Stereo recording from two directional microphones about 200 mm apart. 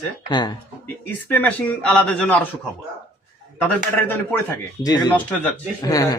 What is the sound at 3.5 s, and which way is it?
Speech, 10° left (ahead or behind).